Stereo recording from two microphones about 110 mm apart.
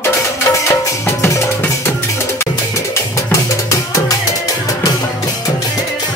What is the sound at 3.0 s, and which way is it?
Music, 25° left (ahead or behind).